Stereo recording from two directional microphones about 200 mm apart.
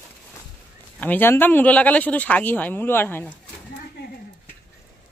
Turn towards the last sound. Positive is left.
turn(degrees=10)  # may be behind; listen again after turning